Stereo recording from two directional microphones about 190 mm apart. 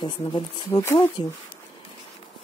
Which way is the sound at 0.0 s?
25° left (ahead or behind).